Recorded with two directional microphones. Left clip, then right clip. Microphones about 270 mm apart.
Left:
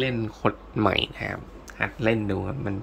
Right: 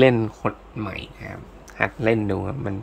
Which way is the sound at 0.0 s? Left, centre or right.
Centre.